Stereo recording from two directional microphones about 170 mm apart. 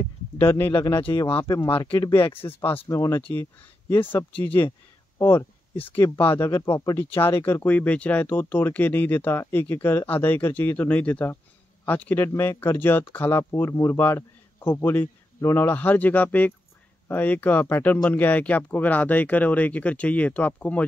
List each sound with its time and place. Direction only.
0.0 s speech: 15° left (ahead or behind)
1.7 s speech: 30° left (ahead or behind); by 20.8 s 10° left (ahead or behind)